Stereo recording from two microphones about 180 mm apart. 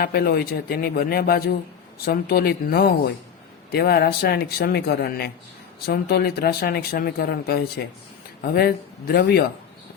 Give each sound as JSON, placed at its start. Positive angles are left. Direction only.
{"t": 0.0, "sound": "speech", "side_deg": 60}